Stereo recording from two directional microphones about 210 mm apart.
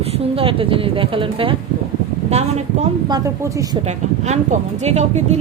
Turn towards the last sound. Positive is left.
turn(degrees=-30)  # may be behind; listen again after turning